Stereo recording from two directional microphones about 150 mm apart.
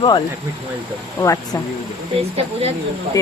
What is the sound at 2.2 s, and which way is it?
Speech, 40° right (ahead or behind).